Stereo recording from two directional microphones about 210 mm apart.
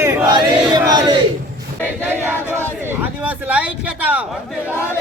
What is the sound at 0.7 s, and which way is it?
Battle cry, 20° right (ahead or behind).